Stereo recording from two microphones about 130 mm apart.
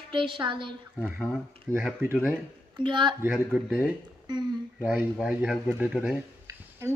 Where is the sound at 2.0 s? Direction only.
15° right (ahead or behind).